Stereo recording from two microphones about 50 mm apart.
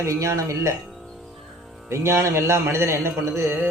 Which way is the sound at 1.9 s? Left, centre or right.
Right.